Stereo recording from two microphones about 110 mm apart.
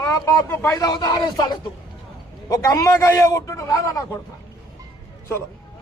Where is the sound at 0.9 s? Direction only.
40° left (ahead or behind).